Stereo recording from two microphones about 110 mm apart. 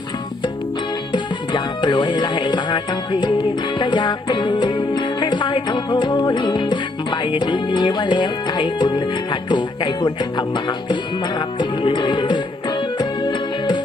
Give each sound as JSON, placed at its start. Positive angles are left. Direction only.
{"t": 1.1, "sound": "speech", "side_deg": 45}
{"t": 11.3, "sound": "music", "side_deg": 45}